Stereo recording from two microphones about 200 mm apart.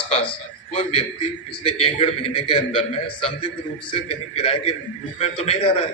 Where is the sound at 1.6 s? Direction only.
30° left (ahead or behind).